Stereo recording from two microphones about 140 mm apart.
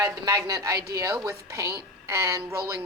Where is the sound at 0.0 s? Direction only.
25° right (ahead or behind).